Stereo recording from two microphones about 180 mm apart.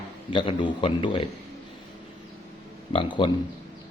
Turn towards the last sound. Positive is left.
turn(degrees=30)  # may be behind; listen again after turning